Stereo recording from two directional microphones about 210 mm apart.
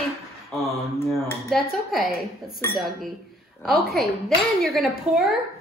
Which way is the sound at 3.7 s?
Centre (ahead or behind).